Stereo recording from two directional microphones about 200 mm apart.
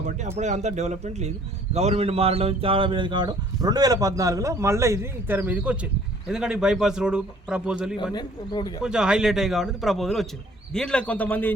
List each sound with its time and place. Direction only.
0.3 s a man's voice: 35° right (ahead or behind); by 7.9 s 5° right (ahead or behind)
8.1 s speech: 20° left (ahead or behind)
8.8 s a man's voice: 5° right (ahead or behind)